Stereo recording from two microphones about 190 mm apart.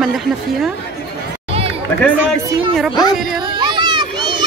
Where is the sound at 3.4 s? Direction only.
25° right (ahead or behind).